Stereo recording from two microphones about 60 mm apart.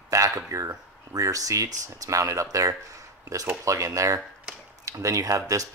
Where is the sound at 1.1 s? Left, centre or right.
Right.